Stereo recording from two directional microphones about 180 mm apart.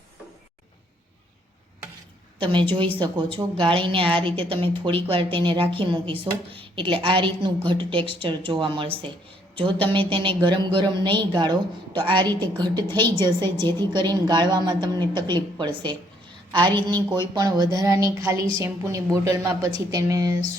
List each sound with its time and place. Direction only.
2.5 s a woman's voice: 25° right (ahead or behind)